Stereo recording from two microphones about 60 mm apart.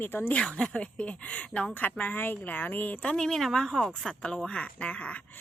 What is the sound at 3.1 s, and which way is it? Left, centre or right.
Speech, centre.